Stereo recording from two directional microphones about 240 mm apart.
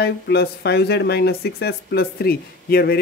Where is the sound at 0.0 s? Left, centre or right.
Left.